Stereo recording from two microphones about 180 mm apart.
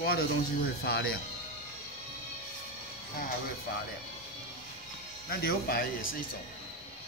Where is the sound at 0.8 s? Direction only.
60° left (ahead or behind).